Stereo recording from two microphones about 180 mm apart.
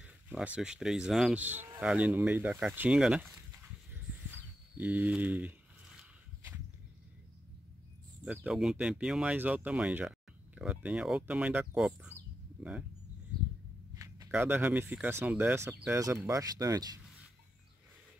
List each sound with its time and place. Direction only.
0.0 s speech: 5° right (ahead or behind)
4.7 s speech: 10° right (ahead or behind)
5.9 s a sound: 10° right (ahead or behind)
8.3 s speech: 5° right (ahead or behind)
13.9 s speech: 20° right (ahead or behind)